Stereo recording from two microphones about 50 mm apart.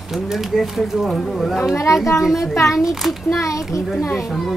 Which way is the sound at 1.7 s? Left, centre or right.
Left.